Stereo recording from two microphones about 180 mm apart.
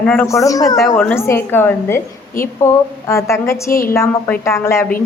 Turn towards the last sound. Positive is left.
turn(degrees=15)  # may be behind; listen again after turning